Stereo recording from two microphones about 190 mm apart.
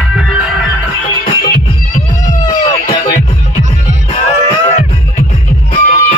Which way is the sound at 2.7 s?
40° left (ahead or behind).